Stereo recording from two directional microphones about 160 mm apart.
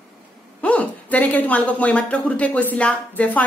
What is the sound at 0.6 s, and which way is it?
Speech, 10° left (ahead or behind).